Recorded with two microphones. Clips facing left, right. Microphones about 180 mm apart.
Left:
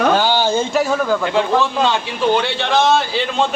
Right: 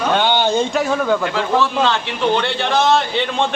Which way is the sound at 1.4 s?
15° left (ahead or behind).